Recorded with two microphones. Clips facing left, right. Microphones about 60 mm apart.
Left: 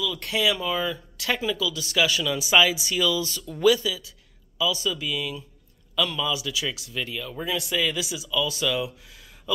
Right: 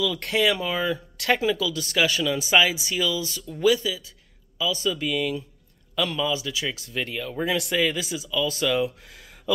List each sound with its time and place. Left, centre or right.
0.0 s speech: right
1.1 s a sound: right
1.4 s speech: right
4.6 s a man's voice: right
6.2 s speech: right
6.8 s speech: right
7.7 s speech: right